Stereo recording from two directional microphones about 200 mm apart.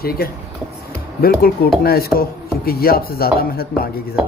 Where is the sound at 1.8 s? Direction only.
50° left (ahead or behind).